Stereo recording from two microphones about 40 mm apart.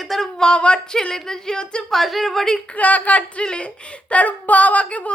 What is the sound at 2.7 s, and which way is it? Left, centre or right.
Speech, left.